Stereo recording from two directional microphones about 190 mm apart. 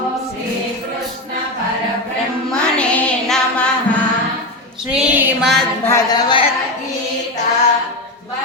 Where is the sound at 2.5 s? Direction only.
5° left (ahead or behind).